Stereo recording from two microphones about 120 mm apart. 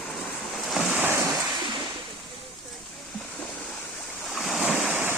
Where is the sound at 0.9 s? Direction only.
15° right (ahead or behind).